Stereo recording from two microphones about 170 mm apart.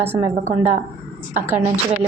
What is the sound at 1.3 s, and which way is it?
Speech, 10° right (ahead or behind).